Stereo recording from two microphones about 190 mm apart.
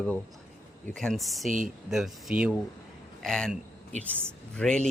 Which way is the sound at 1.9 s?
5° right (ahead or behind).